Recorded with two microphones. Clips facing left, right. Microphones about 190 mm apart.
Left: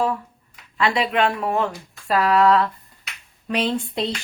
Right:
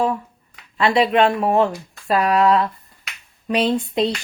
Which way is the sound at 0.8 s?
25° right (ahead or behind).